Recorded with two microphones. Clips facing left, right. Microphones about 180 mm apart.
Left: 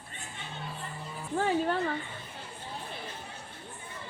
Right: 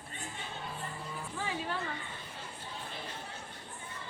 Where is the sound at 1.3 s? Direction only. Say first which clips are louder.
Left 11 dB; 55° left (ahead or behind).